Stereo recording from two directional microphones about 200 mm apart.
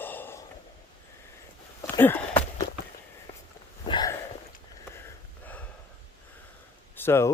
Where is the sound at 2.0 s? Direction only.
10° left (ahead or behind).